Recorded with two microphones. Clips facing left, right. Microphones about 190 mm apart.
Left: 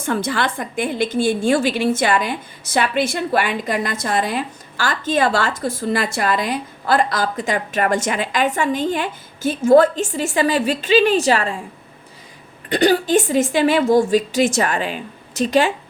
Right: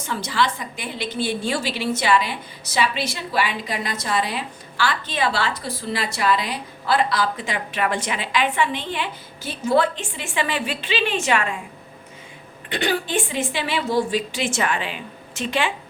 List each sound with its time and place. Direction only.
0.0 s a woman's voice: 55° left (ahead or behind); by 11.5 s 35° left (ahead or behind)
12.6 s a woman's voice: 40° left (ahead or behind)